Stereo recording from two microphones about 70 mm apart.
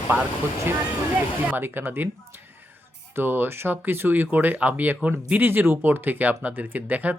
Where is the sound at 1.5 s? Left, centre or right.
Right.